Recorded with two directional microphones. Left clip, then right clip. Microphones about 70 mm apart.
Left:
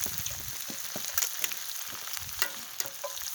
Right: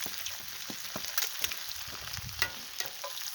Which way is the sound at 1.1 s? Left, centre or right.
Left.